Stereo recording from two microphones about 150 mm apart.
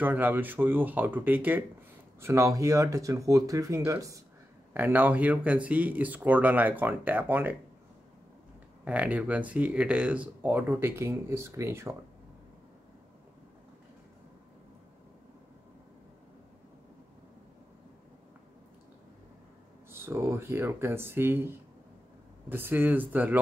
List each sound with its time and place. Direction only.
0.0 s speech: 10° right (ahead or behind)
8.8 s speech: 10° right (ahead or behind)
19.9 s speech: 15° right (ahead or behind)